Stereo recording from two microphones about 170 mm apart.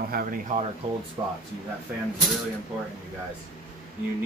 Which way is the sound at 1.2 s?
20° right (ahead or behind).